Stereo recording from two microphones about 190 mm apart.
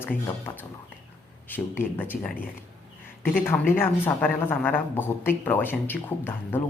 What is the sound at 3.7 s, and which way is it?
A woman's voice, 10° left (ahead or behind).